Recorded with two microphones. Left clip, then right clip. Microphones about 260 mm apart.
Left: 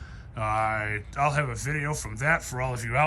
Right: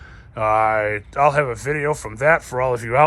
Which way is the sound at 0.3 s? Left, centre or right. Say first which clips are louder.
Right 10 dB; centre.